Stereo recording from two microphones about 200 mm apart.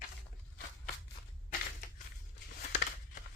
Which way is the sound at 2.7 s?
45° left (ahead or behind).